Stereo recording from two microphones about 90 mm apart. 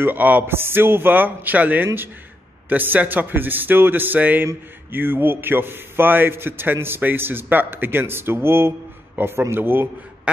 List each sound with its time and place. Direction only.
0.0 s a man's voice: 20° right (ahead or behind)
10.3 s quack: 10° right (ahead or behind)